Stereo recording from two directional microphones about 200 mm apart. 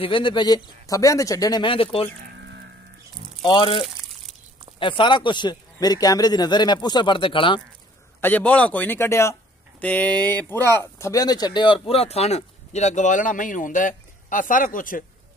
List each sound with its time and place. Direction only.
0.0 s speech: 25° left (ahead or behind)
3.4 s speech: 25° left (ahead or behind)
8.2 s speech: 10° left (ahead or behind); by 15.0 s 45° left (ahead or behind)